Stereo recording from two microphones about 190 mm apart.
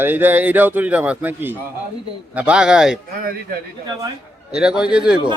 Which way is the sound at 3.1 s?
50° right (ahead or behind).